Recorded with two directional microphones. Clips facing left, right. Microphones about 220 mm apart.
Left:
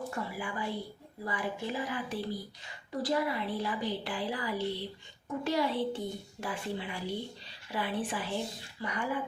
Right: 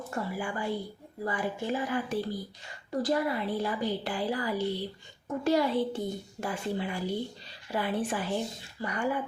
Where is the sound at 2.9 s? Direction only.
45° right (ahead or behind).